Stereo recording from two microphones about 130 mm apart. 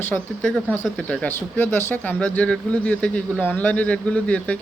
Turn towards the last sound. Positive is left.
turn(degrees=10)  # may be behind; listen again after turning